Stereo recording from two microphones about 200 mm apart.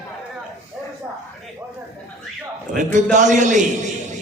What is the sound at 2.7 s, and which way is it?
Speech, 40° right (ahead or behind).